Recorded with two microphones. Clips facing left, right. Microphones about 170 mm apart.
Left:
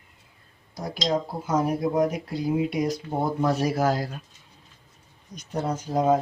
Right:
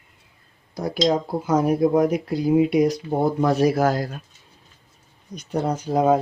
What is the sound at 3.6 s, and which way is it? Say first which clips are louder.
Speech: right 5 dB; 55° right (ahead or behind).